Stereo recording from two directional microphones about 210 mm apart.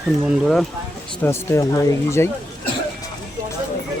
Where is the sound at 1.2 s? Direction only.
10° left (ahead or behind).